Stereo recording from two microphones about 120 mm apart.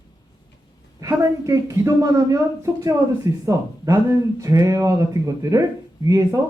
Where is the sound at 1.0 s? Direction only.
25° right (ahead or behind).